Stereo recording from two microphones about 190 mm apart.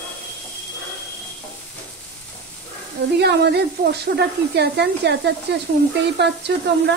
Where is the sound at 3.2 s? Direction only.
60° right (ahead or behind).